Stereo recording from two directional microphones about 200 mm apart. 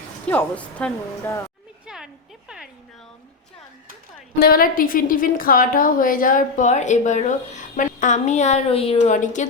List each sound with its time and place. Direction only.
0.3 s a woman's voice: 5° left (ahead or behind)
4.4 s a woman's voice: 50° left (ahead or behind)